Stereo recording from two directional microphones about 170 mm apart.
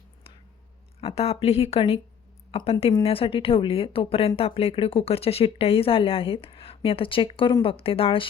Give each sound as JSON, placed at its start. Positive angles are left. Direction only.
{"t": 1.0, "sound": "a woman's voice", "side_deg": 35}